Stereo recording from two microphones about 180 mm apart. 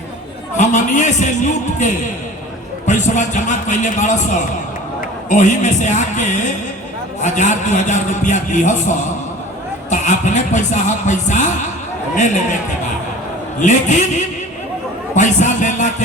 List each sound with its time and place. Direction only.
0.5 s a man's voice: 40° left (ahead or behind)
13.6 s a man's voice: 40° left (ahead or behind)